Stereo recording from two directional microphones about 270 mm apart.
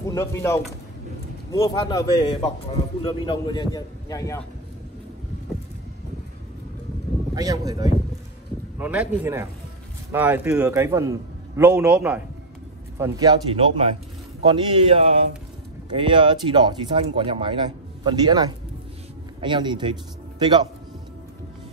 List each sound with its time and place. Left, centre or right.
0.1 s speech: centre
7.3 s speech: centre